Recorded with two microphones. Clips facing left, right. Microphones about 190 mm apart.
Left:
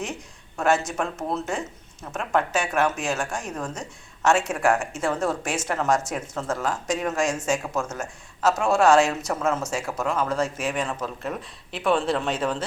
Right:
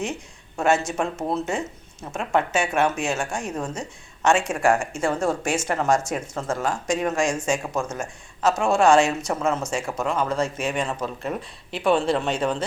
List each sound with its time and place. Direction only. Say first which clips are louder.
0.6 s speech: right 1 dB; centre (ahead or behind)